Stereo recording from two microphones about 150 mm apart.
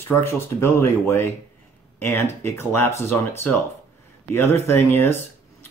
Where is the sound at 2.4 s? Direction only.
15° left (ahead or behind).